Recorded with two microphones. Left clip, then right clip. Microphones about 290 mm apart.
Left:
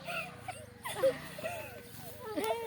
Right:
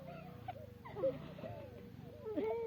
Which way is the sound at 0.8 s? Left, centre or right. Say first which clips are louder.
Left 8 dB; centre.